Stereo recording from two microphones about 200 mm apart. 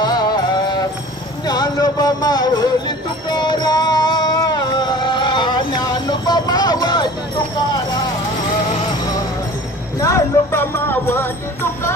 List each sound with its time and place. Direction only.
1.4 s music: 20° left (ahead or behind)
9.9 s music: 15° left (ahead or behind)